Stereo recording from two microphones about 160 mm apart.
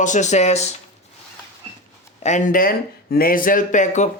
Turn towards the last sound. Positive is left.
turn(degrees=50)  # may be behind; listen again after turning